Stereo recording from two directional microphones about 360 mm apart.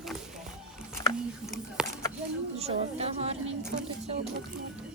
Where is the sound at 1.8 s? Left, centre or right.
Centre.